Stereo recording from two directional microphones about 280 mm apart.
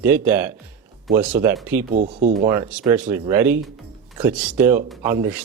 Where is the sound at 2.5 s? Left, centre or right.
Centre.